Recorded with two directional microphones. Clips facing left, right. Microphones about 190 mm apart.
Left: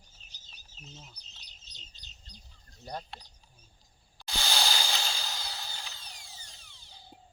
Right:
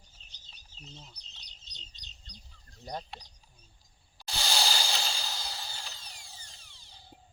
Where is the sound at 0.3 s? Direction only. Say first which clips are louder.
Right 1 dB; 5° left (ahead or behind).